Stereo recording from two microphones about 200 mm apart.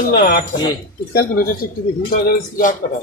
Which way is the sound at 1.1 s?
50° left (ahead or behind).